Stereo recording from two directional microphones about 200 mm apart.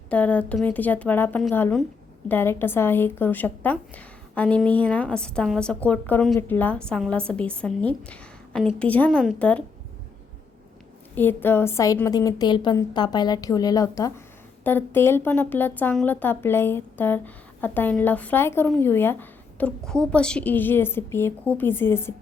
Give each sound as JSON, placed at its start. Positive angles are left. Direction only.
{"t": 0.1, "sound": "speech", "side_deg": 5}
{"t": 11.1, "sound": "speech", "side_deg": 10}